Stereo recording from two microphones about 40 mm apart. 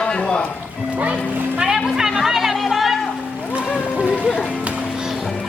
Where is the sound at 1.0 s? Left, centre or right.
Right.